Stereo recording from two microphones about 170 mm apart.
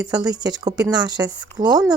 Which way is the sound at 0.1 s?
25° right (ahead or behind).